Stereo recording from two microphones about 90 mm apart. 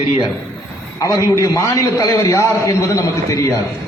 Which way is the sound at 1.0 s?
35° left (ahead or behind).